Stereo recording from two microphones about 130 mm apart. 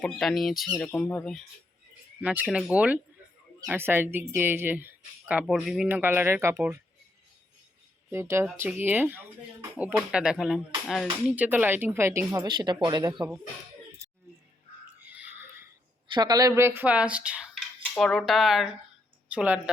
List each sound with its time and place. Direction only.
0.0 s speech: centre (ahead or behind)
2.2 s speech: 10° right (ahead or behind)
5.9 s speech: 15° right (ahead or behind)
8.1 s speech: 20° right (ahead or behind); by 11.1 s centre (ahead or behind)
11.3 s speech: 10° right (ahead or behind); by 13.2 s 30° right (ahead or behind)
15.1 s a sound: 15° right (ahead or behind)
16.1 s speech: 30° right (ahead or behind); by 17.5 s 10° right (ahead or behind)
17.9 s speech: 5° left (ahead or behind)